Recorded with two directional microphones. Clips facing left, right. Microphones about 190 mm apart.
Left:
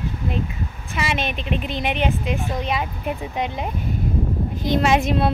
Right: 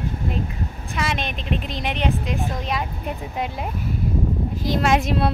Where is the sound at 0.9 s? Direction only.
5° left (ahead or behind).